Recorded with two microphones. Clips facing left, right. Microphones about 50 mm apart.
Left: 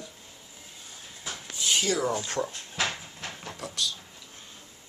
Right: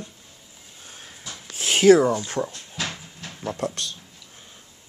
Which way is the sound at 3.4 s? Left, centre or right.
Right.